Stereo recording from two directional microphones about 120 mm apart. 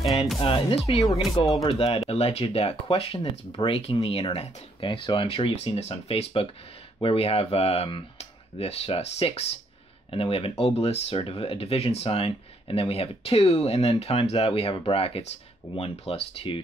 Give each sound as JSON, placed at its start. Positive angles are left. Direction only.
{"t": 0.4, "sound": "speech", "side_deg": 50}